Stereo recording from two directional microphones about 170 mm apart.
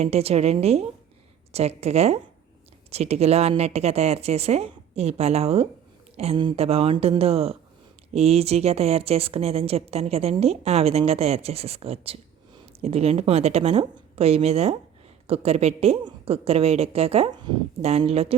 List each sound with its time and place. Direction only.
0.0 s speech: 35° right (ahead or behind)
17.8 s speech: 40° right (ahead or behind)